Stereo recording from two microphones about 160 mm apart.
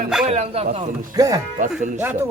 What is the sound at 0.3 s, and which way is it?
Speech, 40° right (ahead or behind).